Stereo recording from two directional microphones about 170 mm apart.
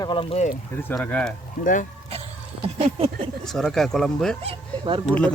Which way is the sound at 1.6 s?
50° left (ahead or behind).